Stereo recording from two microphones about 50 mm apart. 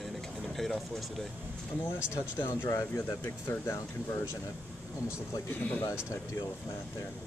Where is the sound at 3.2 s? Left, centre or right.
Left.